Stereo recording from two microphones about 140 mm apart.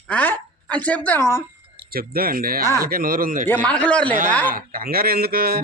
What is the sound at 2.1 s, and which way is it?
Speech, 90° right.